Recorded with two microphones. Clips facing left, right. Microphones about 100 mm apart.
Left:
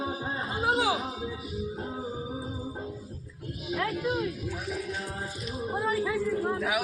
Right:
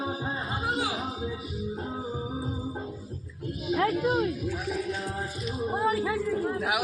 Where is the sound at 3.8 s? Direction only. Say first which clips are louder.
Right 4 dB; 45° right (ahead or behind).